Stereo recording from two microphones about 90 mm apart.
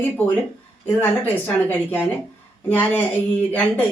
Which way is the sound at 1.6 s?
20° left (ahead or behind).